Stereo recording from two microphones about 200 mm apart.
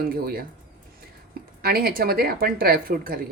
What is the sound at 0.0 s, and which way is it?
Speech, 50° right (ahead or behind).